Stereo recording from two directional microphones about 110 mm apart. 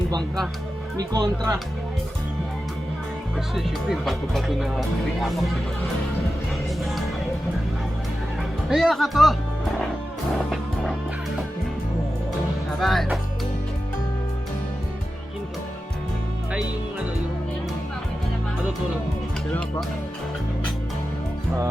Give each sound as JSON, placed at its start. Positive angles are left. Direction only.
{"t": 0.9, "sound": "speech", "side_deg": -35}
{"t": 3.3, "sound": "speech", "side_deg": 0}
{"t": 8.7, "sound": "speech", "side_deg": 0}
{"t": 12.8, "sound": "speech", "side_deg": 0}
{"t": 16.5, "sound": "music", "side_deg": -10}